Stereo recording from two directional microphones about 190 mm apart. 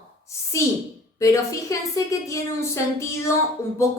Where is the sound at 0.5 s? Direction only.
15° left (ahead or behind).